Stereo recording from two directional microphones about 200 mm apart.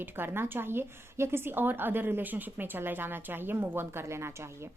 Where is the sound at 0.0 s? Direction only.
10° right (ahead or behind).